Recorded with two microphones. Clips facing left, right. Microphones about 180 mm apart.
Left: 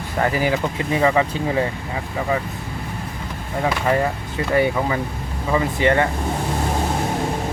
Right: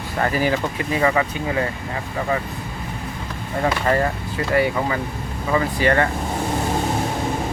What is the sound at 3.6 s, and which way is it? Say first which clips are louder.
Speech: even; 10° left (ahead or behind).